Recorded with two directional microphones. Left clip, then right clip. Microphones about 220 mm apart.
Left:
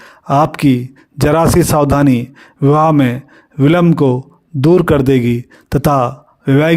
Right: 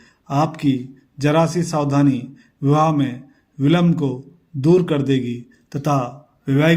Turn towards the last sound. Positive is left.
turn(degrees=45)  # may be behind; listen again after turning